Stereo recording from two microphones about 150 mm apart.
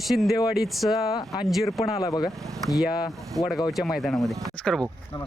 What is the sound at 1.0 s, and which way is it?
Speech, 40° left (ahead or behind).